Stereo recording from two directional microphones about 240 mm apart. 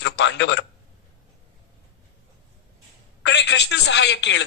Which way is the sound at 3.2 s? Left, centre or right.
Left.